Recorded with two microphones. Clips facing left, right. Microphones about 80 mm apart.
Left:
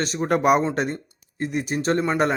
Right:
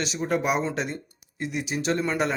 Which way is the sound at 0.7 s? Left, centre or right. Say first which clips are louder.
Left 5 dB; left.